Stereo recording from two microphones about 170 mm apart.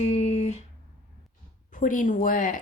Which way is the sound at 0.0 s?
40° left (ahead or behind).